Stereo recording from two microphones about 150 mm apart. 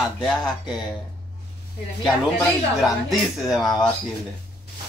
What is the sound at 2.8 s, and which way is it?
Speech, centre (ahead or behind).